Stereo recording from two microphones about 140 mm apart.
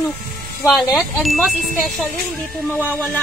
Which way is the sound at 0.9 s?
Centre (ahead or behind).